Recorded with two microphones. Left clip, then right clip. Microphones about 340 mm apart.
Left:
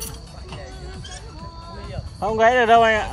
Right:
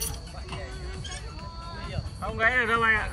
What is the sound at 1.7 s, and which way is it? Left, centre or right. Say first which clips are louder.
Music: left 2 dB; left.